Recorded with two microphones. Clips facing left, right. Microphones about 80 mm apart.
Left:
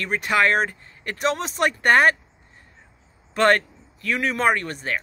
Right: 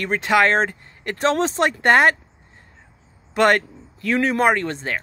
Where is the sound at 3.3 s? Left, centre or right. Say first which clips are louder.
Right 1 dB; right.